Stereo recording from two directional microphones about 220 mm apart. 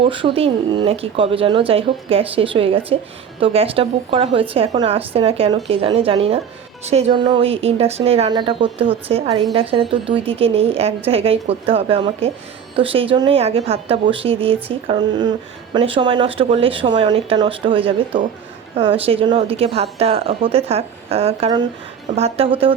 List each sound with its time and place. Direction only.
0.0 s speech: 25° right (ahead or behind)